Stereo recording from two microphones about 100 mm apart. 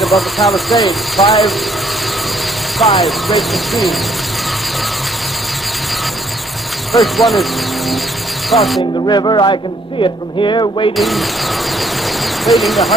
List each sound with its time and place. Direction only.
0.0 s speech: centre (ahead or behind)
2.8 s speech: centre (ahead or behind)
6.9 s speech: centre (ahead or behind)
8.5 s speech: centre (ahead or behind)
9.0 s speech: 45° left (ahead or behind)
10.9 s speech: centre (ahead or behind)
12.4 s speech: centre (ahead or behind)